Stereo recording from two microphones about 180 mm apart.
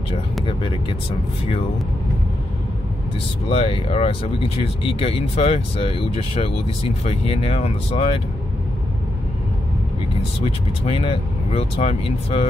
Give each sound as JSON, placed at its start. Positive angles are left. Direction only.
{"t": 0.5, "sound": "speech", "side_deg": 30}
{"t": 3.4, "sound": "speech", "side_deg": 30}
{"t": 10.4, "sound": "speech", "side_deg": 30}